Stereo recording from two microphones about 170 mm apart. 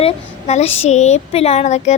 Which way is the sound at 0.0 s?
35° left (ahead or behind).